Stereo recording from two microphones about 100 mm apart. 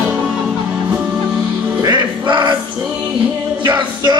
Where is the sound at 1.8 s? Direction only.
45° right (ahead or behind).